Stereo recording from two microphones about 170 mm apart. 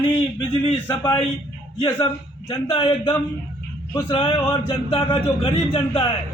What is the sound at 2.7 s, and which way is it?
A man's voice, 30° left (ahead or behind).